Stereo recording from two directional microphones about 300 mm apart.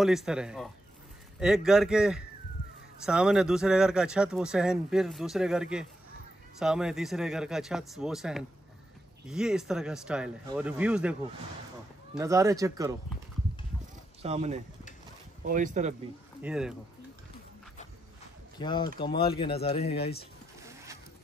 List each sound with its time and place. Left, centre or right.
0.0 s speech: centre
12.2 s speech: centre
14.2 s speech: right
16.4 s speech: centre
18.6 s speech: centre
19.8 s speech: left
20.6 s zipper: centre